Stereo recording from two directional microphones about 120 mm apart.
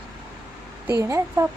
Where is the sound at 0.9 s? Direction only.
20° right (ahead or behind).